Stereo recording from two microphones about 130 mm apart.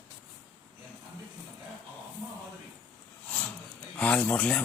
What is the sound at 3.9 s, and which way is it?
Speech, 10° left (ahead or behind).